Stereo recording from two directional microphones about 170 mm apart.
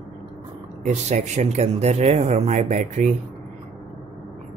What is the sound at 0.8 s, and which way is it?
Speech, 45° right (ahead or behind).